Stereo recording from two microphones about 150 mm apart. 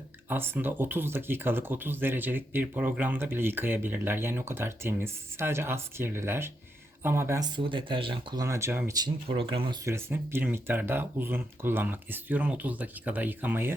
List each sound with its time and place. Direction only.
0.3 s speech: 15° right (ahead or behind)
9.0 s speech: 35° right (ahead or behind)
9.8 s speech: 15° right (ahead or behind)